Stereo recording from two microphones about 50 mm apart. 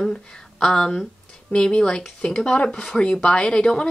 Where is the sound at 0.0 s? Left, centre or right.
Centre.